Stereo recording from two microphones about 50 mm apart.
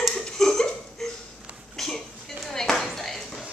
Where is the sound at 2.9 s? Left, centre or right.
Centre.